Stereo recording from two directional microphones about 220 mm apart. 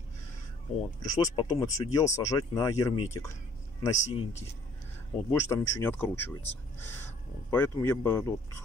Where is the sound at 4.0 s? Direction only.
30° left (ahead or behind).